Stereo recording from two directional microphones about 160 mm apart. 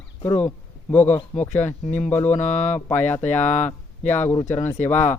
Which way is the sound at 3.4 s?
50° left (ahead or behind).